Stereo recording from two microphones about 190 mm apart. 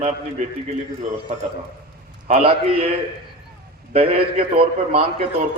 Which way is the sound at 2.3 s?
30° right (ahead or behind).